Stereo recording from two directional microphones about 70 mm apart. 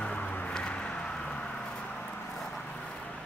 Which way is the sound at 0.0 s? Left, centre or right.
Centre.